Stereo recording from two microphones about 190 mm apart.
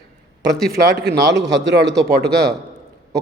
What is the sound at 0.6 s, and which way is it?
Speech, 60° right (ahead or behind).